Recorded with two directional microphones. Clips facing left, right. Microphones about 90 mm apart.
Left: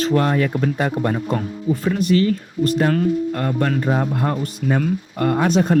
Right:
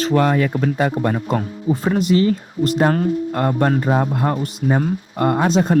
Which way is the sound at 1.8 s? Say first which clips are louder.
Right 1 dB; 35° right (ahead or behind).